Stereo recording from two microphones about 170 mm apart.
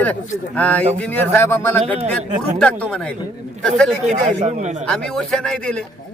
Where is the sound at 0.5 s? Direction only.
10° left (ahead or behind).